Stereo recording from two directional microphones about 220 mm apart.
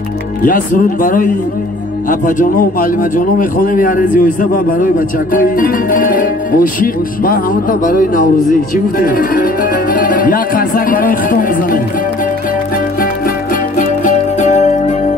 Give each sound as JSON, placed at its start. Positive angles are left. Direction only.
{"t": 0.4, "sound": "speech", "side_deg": 40}
{"t": 13.7, "sound": "music", "side_deg": 35}